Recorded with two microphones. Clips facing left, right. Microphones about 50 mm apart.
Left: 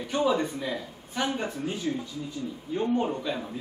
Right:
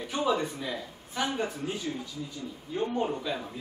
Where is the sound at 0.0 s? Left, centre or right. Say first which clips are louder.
Left 3 dB; centre.